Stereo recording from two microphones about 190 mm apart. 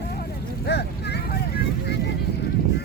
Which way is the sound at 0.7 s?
60° left (ahead or behind).